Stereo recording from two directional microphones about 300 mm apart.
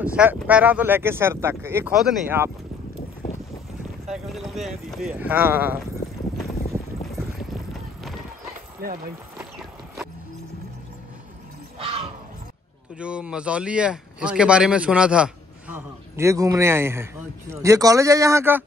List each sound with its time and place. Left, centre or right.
0.0 s speech: centre
4.1 s speech: centre
6.7 s boat: centre
8.8 s speech: right
9.4 s clip-clop: centre
13.0 s speech: centre